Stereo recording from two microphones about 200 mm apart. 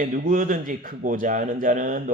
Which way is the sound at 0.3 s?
40° right (ahead or behind).